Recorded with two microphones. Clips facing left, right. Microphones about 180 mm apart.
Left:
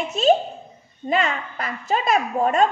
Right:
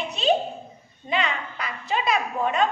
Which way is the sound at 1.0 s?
45° left (ahead or behind).